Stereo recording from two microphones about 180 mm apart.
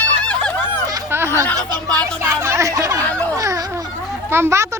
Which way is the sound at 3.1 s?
10° left (ahead or behind).